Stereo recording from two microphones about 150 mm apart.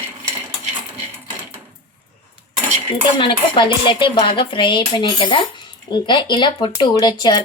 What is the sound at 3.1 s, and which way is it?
Speech, 35° left (ahead or behind).